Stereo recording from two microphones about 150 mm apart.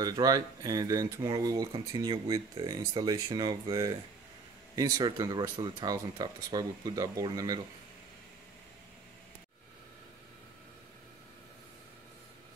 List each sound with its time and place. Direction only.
0.0 s speech: 25° right (ahead or behind)